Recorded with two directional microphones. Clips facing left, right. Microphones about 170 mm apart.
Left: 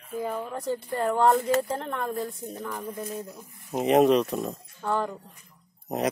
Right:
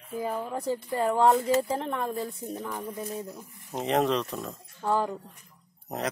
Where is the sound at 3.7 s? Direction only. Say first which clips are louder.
Left 6 dB; 10° left (ahead or behind).